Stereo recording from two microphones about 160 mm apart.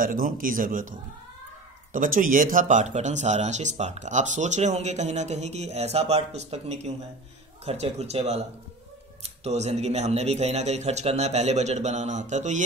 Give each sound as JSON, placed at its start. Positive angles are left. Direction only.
{"t": 0.0, "sound": "a man's voice", "side_deg": -60}